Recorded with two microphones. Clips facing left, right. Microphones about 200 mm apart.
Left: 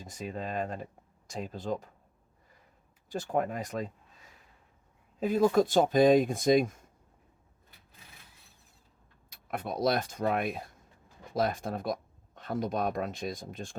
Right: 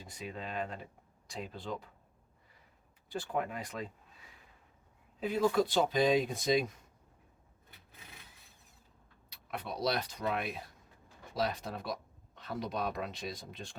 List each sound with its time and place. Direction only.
0.0 s speech: 45° left (ahead or behind)
3.1 s speech: 40° left (ahead or behind)
5.2 s speech: 45° left (ahead or behind)
9.3 s speech: 50° left (ahead or behind)